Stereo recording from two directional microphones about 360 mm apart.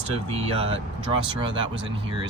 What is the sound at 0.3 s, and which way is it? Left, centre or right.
Speech, centre.